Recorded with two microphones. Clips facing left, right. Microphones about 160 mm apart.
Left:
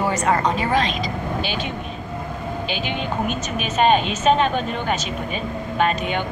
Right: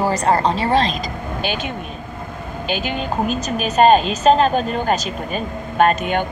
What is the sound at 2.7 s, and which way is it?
Speech, 40° right (ahead or behind).